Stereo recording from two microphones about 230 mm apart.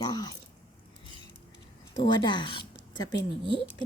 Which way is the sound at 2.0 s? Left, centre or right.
Centre.